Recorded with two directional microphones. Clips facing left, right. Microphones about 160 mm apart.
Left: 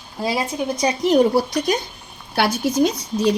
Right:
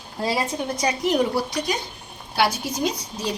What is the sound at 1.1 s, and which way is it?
Speech, 35° left (ahead or behind).